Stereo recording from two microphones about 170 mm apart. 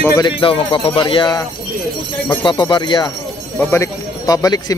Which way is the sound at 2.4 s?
30° left (ahead or behind).